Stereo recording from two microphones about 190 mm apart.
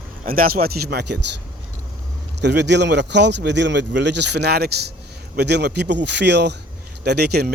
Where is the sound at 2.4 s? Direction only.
65° right (ahead or behind).